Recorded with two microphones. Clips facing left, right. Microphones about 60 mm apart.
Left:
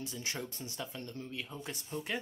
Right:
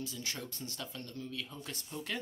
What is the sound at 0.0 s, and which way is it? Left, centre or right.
Speech, left.